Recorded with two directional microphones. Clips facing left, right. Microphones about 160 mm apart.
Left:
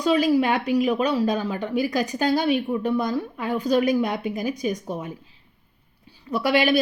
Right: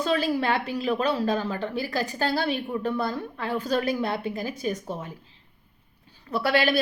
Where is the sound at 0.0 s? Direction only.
15° left (ahead or behind).